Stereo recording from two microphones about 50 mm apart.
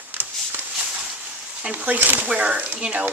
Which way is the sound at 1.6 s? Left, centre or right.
Right.